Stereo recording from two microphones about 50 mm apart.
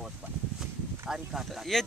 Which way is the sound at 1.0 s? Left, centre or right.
Centre.